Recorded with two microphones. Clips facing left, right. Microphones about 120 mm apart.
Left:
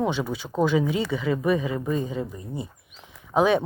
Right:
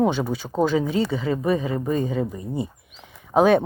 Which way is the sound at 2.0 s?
65° right (ahead or behind).